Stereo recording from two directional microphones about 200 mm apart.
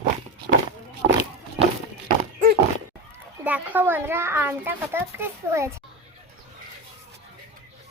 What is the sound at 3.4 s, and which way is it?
Speech, 10° right (ahead or behind).